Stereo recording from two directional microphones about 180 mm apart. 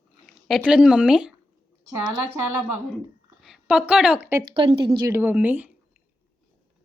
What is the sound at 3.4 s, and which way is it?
Speech, 5° right (ahead or behind).